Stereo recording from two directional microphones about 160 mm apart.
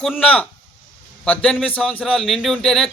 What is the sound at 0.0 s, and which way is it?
A man's voice, 5° left (ahead or behind).